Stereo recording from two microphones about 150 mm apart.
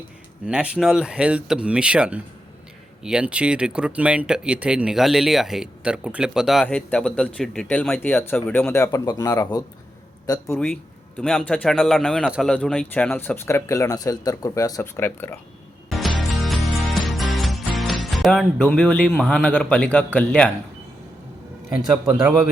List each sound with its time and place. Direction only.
0.4 s speech: 5° right (ahead or behind)
6.7 s speech: 5° left (ahead or behind)
8.2 s speech: 15° left (ahead or behind)
11.2 s speech: 10° left (ahead or behind)
11.7 s speech: centre (ahead or behind); by 15.4 s 15° left (ahead or behind)
15.9 s music: centre (ahead or behind)
21.8 s a man's voice: 5° right (ahead or behind)